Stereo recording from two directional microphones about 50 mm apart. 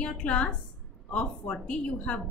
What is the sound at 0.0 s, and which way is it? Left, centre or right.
A woman's voice, left.